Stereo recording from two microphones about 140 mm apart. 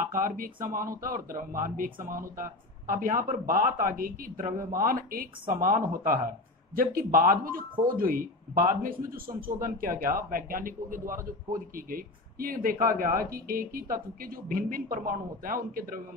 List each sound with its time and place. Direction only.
0.0 s speech: 80° right
5.5 s speech: 80° right
6.7 s speech: 90° right